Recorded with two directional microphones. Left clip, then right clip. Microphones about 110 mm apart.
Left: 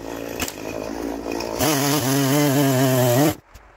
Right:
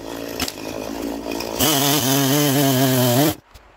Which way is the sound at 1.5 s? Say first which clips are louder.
Right 2 dB; 50° right (ahead or behind).